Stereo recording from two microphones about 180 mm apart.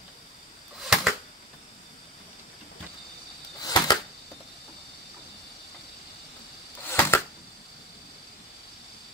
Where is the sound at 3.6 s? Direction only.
20° left (ahead or behind).